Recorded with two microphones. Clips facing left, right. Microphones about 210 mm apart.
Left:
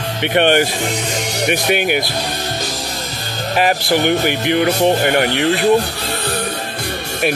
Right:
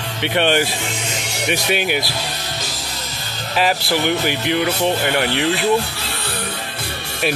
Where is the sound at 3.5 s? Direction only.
50° left (ahead or behind).